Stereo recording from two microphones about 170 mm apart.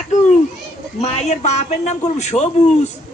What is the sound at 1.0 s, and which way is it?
A man's voice, 40° left (ahead or behind).